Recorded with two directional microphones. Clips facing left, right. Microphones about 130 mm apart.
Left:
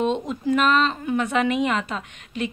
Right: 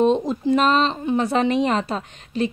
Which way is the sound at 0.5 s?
30° right (ahead or behind).